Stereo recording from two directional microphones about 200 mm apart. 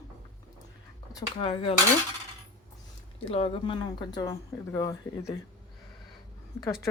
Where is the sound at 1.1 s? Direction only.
20° left (ahead or behind).